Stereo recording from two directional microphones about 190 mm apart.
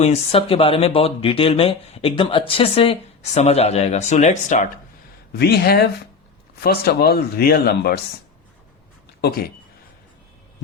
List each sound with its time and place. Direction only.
0.0 s speech: 35° left (ahead or behind)
5.3 s speech: 55° left (ahead or behind)
9.2 s speech: 55° left (ahead or behind)